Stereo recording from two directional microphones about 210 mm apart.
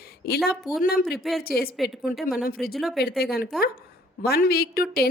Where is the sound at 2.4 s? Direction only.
45° left (ahead or behind).